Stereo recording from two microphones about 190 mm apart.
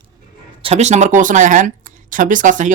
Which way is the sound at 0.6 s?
35° right (ahead or behind).